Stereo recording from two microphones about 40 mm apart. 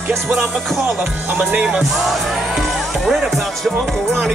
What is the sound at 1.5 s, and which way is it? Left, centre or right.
Music, right.